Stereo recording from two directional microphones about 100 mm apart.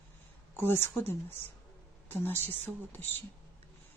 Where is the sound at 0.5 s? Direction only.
25° left (ahead or behind).